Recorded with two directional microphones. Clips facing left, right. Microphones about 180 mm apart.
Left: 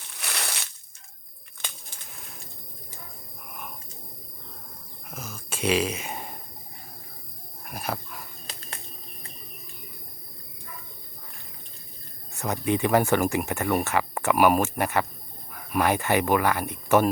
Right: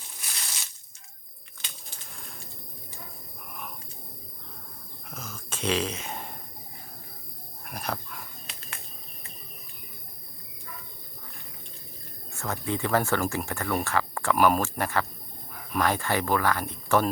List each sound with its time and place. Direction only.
0.1 s a sound: 70° left (ahead or behind)
2.1 s pigeon: 5° left (ahead or behind)
5.1 s throat clearing: 10° left (ahead or behind)
7.6 s dog: 5° left (ahead or behind)
12.3 s speech: 20° left (ahead or behind)